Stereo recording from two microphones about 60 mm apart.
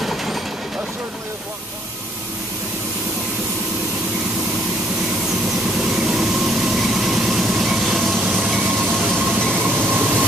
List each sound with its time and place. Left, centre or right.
0.0 s train: centre
5.8 s vehicle: centre
8.9 s vehicle: centre
9.5 s train: right